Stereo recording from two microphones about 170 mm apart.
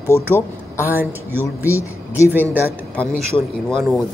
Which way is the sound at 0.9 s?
10° right (ahead or behind).